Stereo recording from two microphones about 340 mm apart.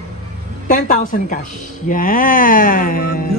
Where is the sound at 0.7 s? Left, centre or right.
Left.